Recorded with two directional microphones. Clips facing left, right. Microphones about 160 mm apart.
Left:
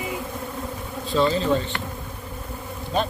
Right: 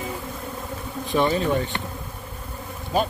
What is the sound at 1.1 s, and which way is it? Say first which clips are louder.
Speech: left 1 dB; 15° right (ahead or behind).